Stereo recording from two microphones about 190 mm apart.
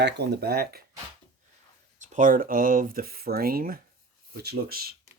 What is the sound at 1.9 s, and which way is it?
Speech, 40° right (ahead or behind).